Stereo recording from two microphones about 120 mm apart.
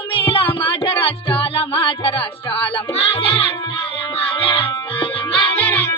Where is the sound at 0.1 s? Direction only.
50° left (ahead or behind).